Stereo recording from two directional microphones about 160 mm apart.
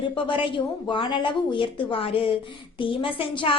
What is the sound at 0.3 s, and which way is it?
A woman's voice, 30° left (ahead or behind).